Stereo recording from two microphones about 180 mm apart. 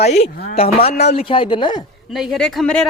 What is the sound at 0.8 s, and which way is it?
Speech, 35° left (ahead or behind).